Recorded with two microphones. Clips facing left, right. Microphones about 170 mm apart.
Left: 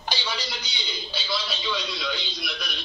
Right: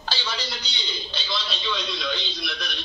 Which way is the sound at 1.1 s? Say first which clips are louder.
Left 2 dB; 5° left (ahead or behind).